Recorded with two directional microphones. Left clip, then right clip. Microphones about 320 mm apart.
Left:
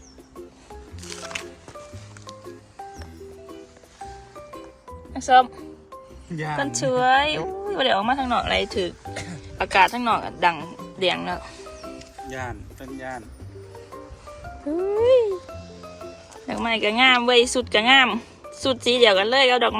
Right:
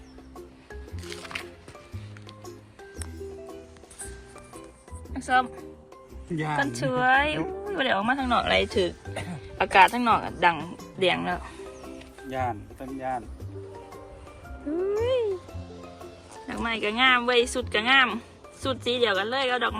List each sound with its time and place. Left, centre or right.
5.1 s speech: centre
6.3 s a woman's voice: right
6.6 s speech: centre
12.3 s speech: centre
14.9 s music: centre
16.5 s speech: centre